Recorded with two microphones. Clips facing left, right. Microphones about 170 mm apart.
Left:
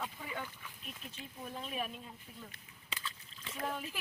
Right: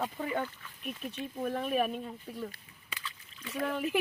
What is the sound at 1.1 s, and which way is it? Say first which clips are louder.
Speech: right 12 dB; 65° right (ahead or behind).